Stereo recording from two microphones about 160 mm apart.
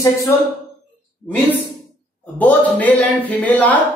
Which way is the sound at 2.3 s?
10° left (ahead or behind).